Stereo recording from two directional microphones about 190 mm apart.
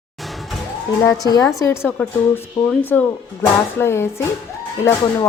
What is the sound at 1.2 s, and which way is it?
Speech, 20° left (ahead or behind).